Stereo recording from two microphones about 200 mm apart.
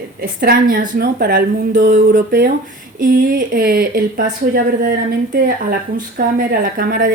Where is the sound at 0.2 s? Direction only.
50° right (ahead or behind).